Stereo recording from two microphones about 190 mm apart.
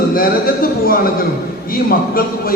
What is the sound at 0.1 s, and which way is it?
A man's voice, 50° left (ahead or behind).